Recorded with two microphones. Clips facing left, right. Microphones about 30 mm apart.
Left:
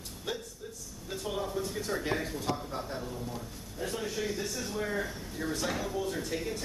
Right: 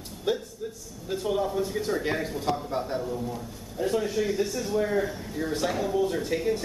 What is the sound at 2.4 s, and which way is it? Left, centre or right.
Speech, right.